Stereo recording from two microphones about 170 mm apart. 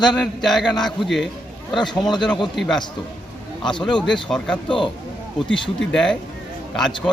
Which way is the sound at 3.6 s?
25° left (ahead or behind).